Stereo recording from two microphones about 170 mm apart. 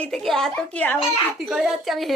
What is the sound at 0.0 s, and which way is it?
Speech, centre (ahead or behind).